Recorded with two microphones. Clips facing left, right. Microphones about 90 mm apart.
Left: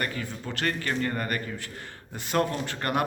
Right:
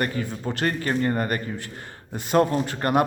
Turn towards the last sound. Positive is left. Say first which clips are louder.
# right 6 dB
turn(degrees=-25)  # may be behind; listen again after turning